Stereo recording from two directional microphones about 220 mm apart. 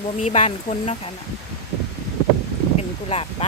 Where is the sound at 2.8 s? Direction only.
25° left (ahead or behind).